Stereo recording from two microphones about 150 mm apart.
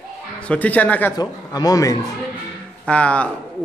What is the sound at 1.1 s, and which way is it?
Speech, 25° left (ahead or behind).